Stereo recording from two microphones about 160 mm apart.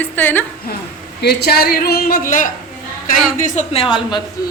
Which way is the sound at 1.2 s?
90° left.